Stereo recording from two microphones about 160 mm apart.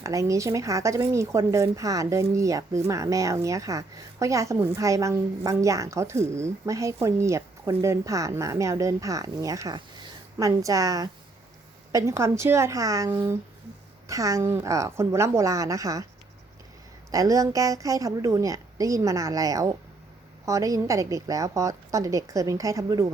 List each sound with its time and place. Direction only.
0.0 s speech: 20° right (ahead or behind)
17.1 s speech: 20° right (ahead or behind)